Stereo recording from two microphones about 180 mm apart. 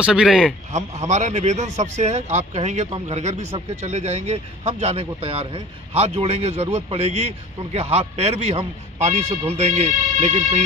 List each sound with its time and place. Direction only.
0.0 s a man's voice: 5° right (ahead or behind)
0.7 s speech: 40° right (ahead or behind)